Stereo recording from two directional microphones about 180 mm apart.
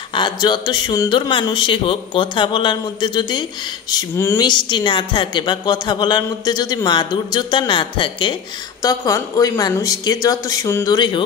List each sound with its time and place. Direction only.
0.1 s a woman's voice: 25° left (ahead or behind)